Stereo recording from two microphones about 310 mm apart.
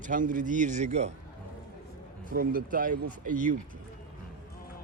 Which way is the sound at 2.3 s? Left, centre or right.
Right.